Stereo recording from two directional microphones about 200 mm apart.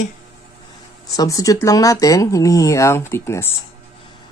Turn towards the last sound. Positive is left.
turn(degrees=15)  # may be behind; listen again after turning